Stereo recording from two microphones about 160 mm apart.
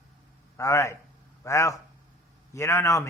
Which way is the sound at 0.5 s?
20° left (ahead or behind).